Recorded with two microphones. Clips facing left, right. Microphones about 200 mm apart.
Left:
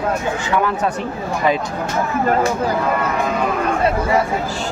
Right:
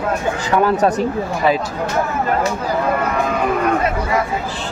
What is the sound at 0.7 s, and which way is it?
Speech, 40° right (ahead or behind).